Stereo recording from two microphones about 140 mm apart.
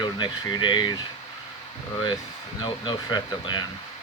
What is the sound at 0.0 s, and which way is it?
Speech, 30° left (ahead or behind).